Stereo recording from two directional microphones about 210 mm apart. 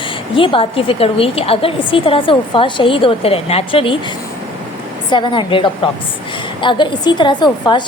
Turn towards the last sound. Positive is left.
turn(degrees=20)  # may be behind; listen again after turning